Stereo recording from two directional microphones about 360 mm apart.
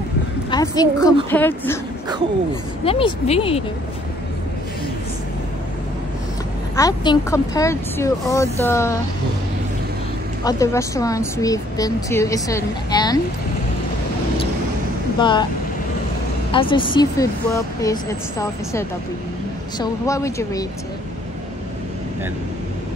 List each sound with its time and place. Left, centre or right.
0.5 s a woman's voice: centre
2.8 s a woman's voice: centre
6.8 s a woman's voice: centre
10.4 s a woman's voice: centre
15.1 s a woman's voice: centre
16.5 s a woman's voice: centre